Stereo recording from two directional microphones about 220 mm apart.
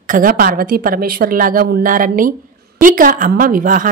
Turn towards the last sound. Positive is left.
turn(degrees=-35)  # may be behind; listen again after turning